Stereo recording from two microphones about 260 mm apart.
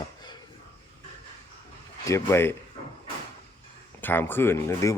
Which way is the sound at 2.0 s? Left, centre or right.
Centre.